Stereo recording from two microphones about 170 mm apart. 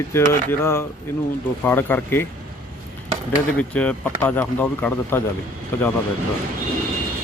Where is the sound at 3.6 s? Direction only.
10° left (ahead or behind).